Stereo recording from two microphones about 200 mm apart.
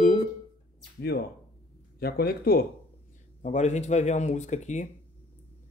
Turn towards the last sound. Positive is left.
turn(degrees=35)  # may be behind; listen again after turning